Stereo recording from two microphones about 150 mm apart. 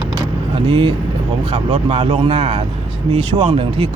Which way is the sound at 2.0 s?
35° right (ahead or behind).